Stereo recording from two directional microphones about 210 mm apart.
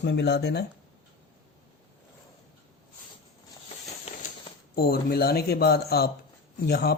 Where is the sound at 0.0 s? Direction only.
55° left (ahead or behind).